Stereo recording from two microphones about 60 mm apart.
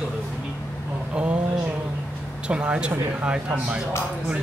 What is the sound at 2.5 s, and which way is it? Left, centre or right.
Speech, centre.